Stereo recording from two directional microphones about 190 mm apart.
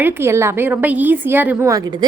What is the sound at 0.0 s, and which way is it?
A woman's voice, 15° right (ahead or behind).